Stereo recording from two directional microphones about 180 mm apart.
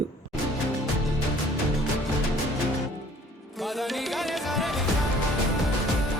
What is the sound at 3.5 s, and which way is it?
Music, centre (ahead or behind).